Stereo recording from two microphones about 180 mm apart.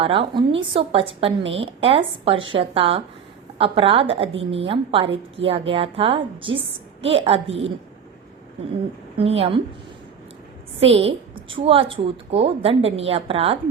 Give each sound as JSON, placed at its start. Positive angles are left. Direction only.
{"t": 0.0, "sound": "speech", "side_deg": -30}
{"t": 9.1, "sound": "speech", "side_deg": -35}
{"t": 10.9, "sound": "speech", "side_deg": -30}